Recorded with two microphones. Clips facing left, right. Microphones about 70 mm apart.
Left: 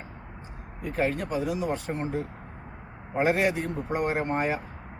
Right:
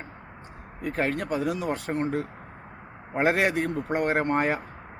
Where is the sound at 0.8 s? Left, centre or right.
Right.